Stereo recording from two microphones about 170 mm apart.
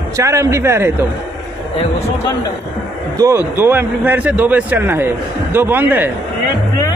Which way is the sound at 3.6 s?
10° right (ahead or behind).